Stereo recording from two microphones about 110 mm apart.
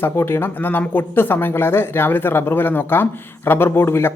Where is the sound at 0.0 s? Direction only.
20° left (ahead or behind).